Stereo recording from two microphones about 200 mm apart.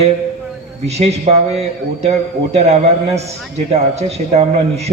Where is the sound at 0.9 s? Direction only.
35° right (ahead or behind).